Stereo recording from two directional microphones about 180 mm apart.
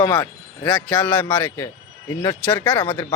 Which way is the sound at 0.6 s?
5° left (ahead or behind).